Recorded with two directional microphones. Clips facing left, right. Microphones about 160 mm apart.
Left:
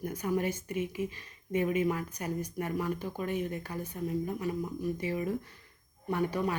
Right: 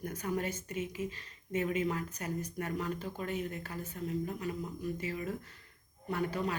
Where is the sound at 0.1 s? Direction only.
10° left (ahead or behind).